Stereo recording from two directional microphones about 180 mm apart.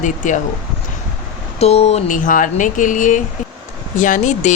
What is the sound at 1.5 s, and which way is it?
Speech, 35° left (ahead or behind).